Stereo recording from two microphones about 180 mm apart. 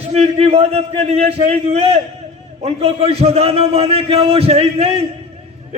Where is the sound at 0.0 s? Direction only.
35° right (ahead or behind).